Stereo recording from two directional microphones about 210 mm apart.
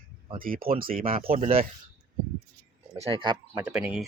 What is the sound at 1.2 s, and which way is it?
Speech, 30° right (ahead or behind).